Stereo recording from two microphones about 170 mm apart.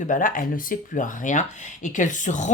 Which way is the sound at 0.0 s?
50° left (ahead or behind).